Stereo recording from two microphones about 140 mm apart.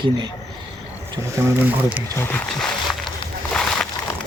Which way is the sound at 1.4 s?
20° right (ahead or behind).